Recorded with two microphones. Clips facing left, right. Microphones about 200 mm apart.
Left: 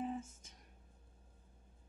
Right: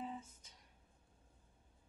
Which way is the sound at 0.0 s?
45° left (ahead or behind).